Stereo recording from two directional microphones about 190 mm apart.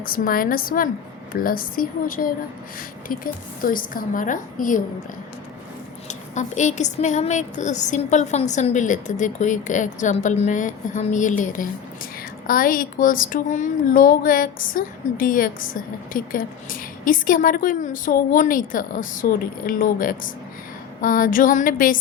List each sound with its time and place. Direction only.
0.0 s a woman's voice: 50° left (ahead or behind)
6.1 s a woman's voice: 40° left (ahead or behind)